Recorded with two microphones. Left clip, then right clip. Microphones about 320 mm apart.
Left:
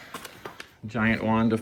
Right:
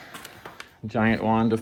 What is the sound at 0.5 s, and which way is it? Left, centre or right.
Speech, centre.